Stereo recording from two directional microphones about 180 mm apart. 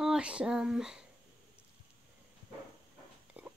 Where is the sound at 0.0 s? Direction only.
5° right (ahead or behind).